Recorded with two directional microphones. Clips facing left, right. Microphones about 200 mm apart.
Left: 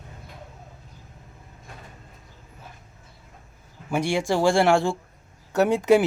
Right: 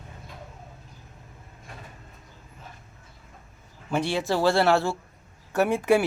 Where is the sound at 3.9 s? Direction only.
10° left (ahead or behind).